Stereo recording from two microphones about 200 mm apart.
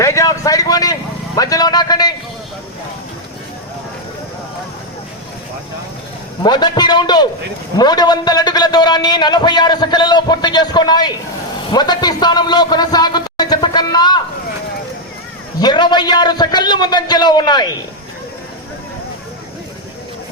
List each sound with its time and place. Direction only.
0.0 s a man's voice: 15° left (ahead or behind)
6.4 s a man's voice: 20° left (ahead or behind)
15.6 s a man's voice: 20° left (ahead or behind)